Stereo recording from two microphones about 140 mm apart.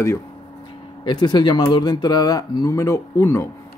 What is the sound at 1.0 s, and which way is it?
Speech, 30° left (ahead or behind).